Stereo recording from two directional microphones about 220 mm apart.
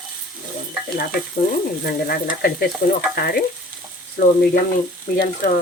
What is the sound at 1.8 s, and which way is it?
Speech, 45° left (ahead or behind).